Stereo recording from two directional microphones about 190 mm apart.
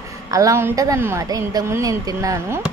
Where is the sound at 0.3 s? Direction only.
15° right (ahead or behind).